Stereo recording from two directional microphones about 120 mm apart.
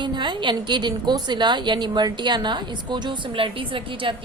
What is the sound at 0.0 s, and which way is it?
A woman's voice, 40° right (ahead or behind).